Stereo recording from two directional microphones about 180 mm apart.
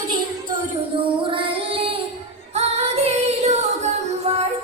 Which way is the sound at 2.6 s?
35° right (ahead or behind).